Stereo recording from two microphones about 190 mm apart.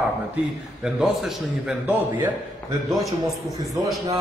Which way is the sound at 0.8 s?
Centre (ahead or behind).